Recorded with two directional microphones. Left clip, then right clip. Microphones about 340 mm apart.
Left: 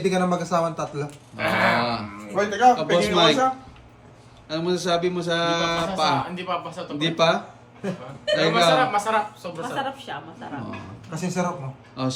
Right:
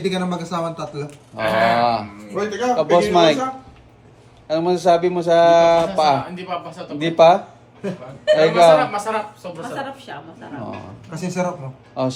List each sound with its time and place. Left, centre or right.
0.0 s a man's voice: centre